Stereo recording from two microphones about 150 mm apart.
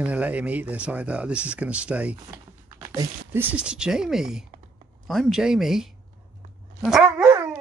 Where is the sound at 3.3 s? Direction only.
10° right (ahead or behind).